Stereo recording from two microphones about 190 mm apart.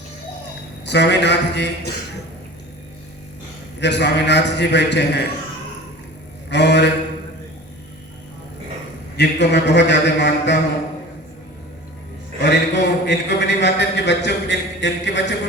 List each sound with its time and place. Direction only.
0.9 s a man's voice: 65° left (ahead or behind)
3.8 s a man's voice: 65° left (ahead or behind)
6.5 s a man's voice: 65° left (ahead or behind)
9.1 s a man's voice: 60° left (ahead or behind)
12.4 s a man's voice: 65° left (ahead or behind)